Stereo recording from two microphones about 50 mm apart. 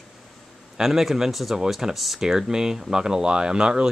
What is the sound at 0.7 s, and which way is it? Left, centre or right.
Speech, centre.